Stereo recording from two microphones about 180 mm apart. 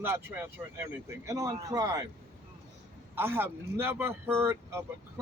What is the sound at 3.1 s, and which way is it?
Speech, 10° right (ahead or behind).